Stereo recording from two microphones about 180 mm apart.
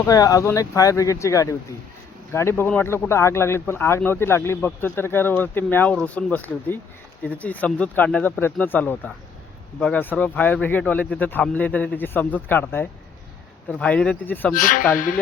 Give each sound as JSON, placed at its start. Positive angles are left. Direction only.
{"t": 0.0, "sound": "speech", "side_deg": 20}
{"t": 14.5, "sound": "speech", "side_deg": 45}